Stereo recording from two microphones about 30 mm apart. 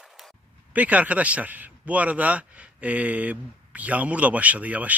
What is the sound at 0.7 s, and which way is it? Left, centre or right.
Speech, right.